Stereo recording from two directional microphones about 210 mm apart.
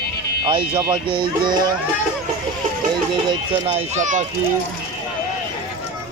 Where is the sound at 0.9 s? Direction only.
25° right (ahead or behind).